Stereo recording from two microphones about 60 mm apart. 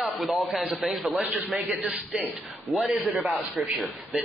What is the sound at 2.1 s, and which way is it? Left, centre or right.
A man's voice, centre.